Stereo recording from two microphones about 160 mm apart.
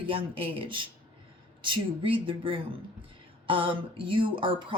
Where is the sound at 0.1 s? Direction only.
35° right (ahead or behind).